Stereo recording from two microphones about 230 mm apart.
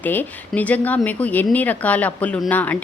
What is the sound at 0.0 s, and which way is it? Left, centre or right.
Speech, centre.